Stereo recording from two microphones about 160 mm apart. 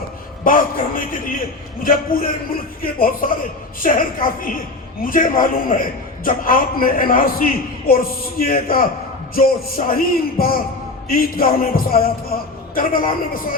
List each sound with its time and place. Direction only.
0.4 s a man's voice: 60° left (ahead or behind)